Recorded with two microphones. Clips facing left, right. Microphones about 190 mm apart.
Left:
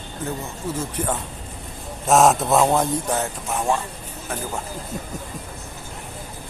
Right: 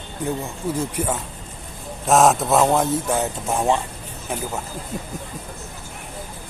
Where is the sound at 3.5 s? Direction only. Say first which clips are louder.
Right 2 dB; 20° right (ahead or behind).